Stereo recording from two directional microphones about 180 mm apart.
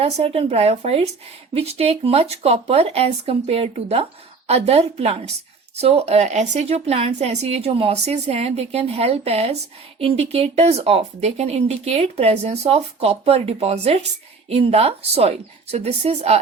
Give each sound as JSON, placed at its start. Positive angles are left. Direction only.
{"t": 0.0, "sound": "speech", "side_deg": -30}